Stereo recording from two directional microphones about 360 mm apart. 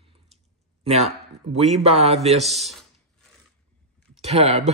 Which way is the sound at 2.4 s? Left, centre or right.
Centre.